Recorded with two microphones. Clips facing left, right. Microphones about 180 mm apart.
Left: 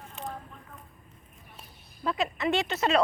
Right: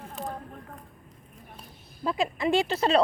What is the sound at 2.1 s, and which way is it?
Speech, 30° right (ahead or behind).